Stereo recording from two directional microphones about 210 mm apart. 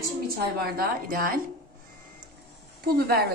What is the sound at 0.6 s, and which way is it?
Speech, 45° right (ahead or behind).